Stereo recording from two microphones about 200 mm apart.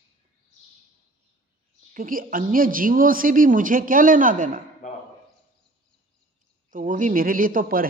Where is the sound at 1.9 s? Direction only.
45° right (ahead or behind).